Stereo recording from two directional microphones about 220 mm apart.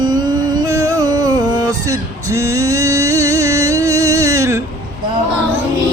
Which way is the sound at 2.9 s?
15° right (ahead or behind).